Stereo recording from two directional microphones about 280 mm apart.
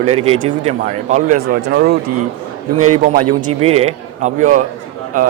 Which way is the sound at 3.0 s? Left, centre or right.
Right.